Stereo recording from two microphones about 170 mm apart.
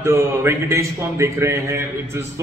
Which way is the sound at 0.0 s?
15° right (ahead or behind).